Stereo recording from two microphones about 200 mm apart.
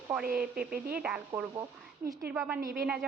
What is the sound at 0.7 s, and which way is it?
Speech, 50° right (ahead or behind).